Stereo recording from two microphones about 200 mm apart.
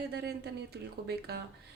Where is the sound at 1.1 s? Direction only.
55° right (ahead or behind).